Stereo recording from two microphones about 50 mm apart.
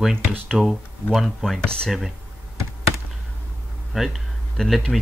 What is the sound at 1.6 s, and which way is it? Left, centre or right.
Speech, centre.